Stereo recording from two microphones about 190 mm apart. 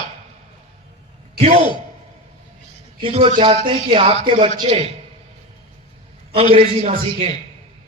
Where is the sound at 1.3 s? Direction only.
35° right (ahead or behind).